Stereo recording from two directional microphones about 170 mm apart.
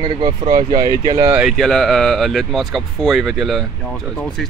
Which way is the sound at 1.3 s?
5° right (ahead or behind).